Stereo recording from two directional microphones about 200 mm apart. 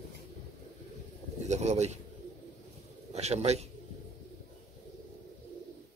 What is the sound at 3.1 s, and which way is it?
Speech, 35° right (ahead or behind).